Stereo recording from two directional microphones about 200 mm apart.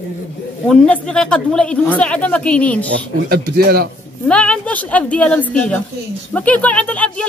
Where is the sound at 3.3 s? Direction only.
50° right (ahead or behind).